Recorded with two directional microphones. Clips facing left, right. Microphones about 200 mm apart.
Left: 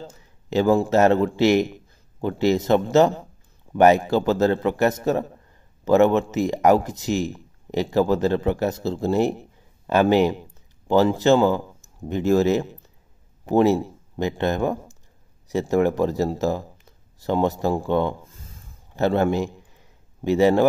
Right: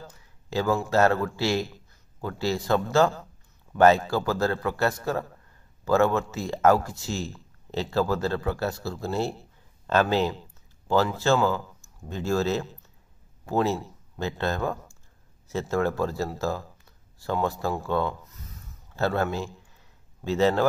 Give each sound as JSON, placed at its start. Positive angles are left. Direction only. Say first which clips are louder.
{"t": 0.0, "sound": "a man's voice", "louder": "left 6 dB", "side_deg": 25}
{"t": 18.9, "sound": "a man's voice", "louder": "left 6 dB", "side_deg": 20}